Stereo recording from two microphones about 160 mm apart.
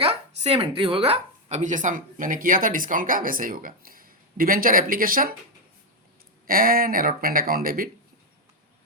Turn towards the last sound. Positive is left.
turn(degrees=-65)  # may be behind; listen again after turning